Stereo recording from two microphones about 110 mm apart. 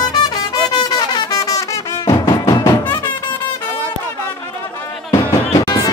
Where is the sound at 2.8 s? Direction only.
20° left (ahead or behind).